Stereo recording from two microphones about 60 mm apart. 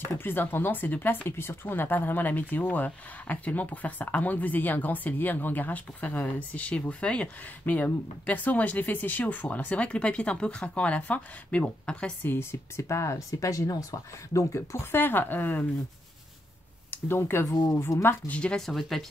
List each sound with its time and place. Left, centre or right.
0.0 s speech: left; by 12.1 s centre
12.2 s speech: left
14.3 s speech: left
15.0 s speech: left
16.9 s speech: left
18.2 s speech: left
18.7 s speech: centre